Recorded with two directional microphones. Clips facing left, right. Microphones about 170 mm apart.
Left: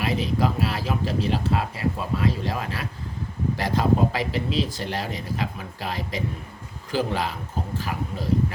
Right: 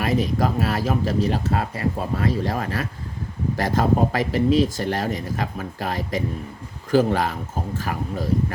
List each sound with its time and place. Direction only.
0.0 s speech: 45° right (ahead or behind)